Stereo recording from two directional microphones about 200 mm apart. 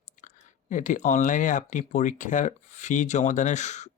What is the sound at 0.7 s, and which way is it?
Speech, 40° left (ahead or behind).